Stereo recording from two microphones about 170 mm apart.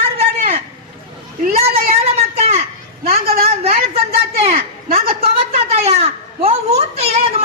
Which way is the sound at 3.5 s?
40° right (ahead or behind).